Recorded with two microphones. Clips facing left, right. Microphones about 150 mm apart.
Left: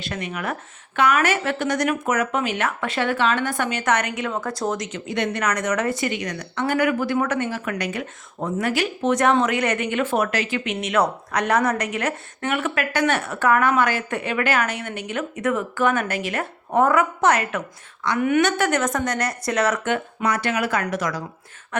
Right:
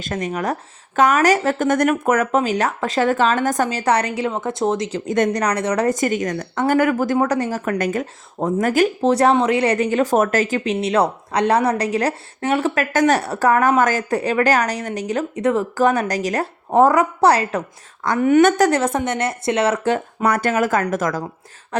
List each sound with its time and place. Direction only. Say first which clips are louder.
0.0 s speech: right 5 dB; 40° right (ahead or behind)
2.4 s speech: right 4 dB; 35° right (ahead or behind)
9.0 s speech: left 1 dB; 30° right (ahead or behind)
20.2 s speech: right 5 dB; 50° right (ahead or behind)